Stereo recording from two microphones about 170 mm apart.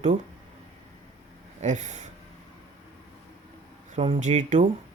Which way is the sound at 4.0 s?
40° right (ahead or behind).